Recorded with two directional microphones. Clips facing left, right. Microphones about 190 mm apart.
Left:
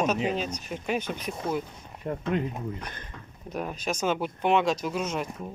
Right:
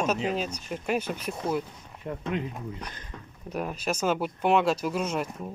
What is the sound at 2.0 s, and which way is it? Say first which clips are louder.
Speech: left 3 dB; 50° left (ahead or behind).